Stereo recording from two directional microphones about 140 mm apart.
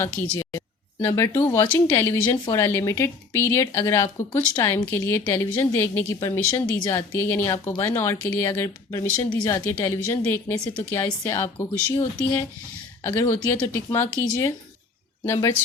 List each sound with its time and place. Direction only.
0.0 s speech: 25° left (ahead or behind)
13.0 s speech: 20° left (ahead or behind)